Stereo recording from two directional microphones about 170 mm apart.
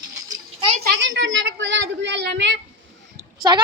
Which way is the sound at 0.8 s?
90° right.